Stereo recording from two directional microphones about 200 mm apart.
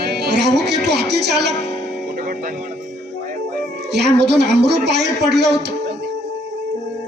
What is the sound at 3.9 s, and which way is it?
A man's voice, 55° right (ahead or behind).